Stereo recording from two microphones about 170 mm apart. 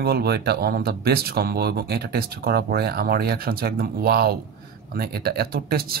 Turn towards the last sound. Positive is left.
turn(degrees=-65)  # may be behind; listen again after turning